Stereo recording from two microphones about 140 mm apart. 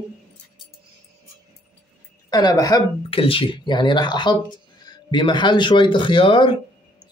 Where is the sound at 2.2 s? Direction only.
30° left (ahead or behind).